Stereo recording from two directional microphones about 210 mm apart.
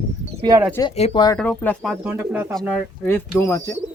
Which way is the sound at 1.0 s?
30° left (ahead or behind).